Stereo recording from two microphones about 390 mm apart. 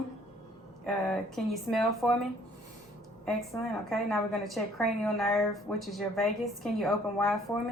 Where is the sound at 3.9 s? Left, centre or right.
Centre.